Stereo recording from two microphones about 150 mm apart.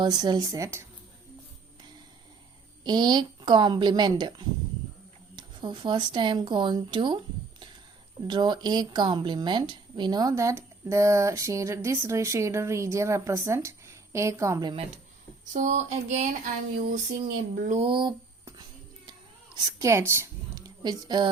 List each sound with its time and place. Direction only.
0.0 s a woman's voice: 30° right (ahead or behind)
2.8 s a woman's voice: 30° right (ahead or behind)
8.3 s a woman's voice: 30° right (ahead or behind)
15.5 s speech: 50° right (ahead or behind)
17.7 s a sound: 35° right (ahead or behind)
19.5 s a woman's voice: 20° right (ahead or behind)